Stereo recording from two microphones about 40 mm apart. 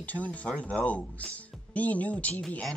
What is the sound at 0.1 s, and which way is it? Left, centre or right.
Speech, left.